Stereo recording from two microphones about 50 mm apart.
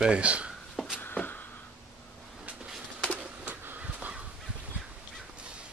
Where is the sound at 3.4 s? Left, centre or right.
Right.